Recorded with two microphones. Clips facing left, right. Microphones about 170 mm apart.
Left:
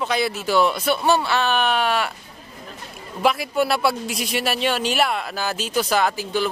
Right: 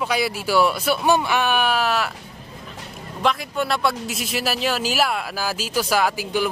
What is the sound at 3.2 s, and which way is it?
A man's voice, 5° left (ahead or behind).